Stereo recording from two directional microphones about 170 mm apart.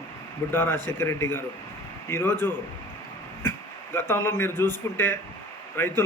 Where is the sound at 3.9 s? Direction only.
15° left (ahead or behind).